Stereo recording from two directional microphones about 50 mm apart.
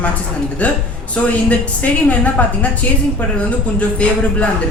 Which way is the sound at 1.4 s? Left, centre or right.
Left.